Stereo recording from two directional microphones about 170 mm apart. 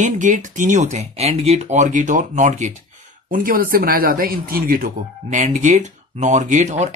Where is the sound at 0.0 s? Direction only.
45° right (ahead or behind).